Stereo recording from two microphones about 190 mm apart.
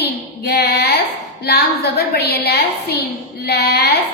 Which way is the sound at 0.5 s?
60° left (ahead or behind).